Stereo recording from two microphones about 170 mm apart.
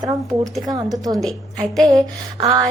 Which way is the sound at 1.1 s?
Centre (ahead or behind).